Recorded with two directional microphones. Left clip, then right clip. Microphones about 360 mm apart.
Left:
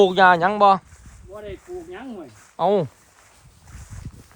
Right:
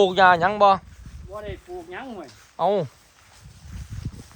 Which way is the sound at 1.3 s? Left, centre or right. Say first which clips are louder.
Even; centre.